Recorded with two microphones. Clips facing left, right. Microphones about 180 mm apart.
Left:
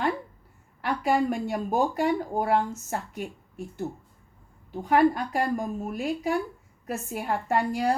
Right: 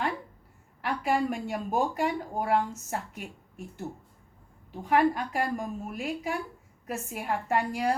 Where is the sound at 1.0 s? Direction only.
40° left (ahead or behind).